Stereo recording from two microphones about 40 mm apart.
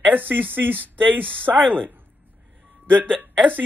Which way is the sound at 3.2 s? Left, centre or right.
Right.